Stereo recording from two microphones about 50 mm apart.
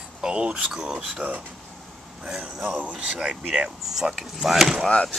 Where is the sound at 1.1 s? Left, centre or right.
Right.